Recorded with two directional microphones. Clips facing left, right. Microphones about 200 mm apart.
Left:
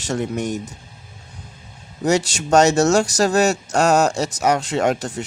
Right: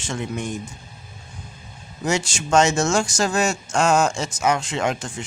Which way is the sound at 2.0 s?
35° left (ahead or behind).